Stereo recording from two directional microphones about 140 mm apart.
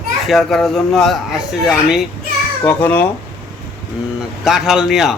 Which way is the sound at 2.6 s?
10° left (ahead or behind).